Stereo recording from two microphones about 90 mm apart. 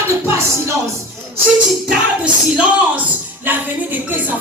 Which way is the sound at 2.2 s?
15° right (ahead or behind).